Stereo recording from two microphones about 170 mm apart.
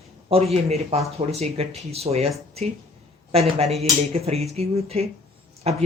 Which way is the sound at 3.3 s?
35° right (ahead or behind).